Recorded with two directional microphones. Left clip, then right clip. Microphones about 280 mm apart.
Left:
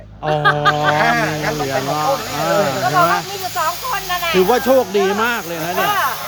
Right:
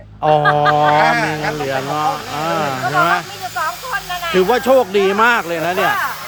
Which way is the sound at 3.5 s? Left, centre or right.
Left.